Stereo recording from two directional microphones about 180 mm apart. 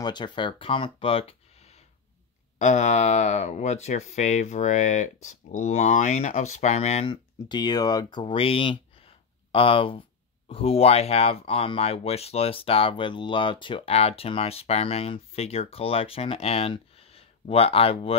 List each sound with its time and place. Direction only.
0.0 s speech: 25° left (ahead or behind)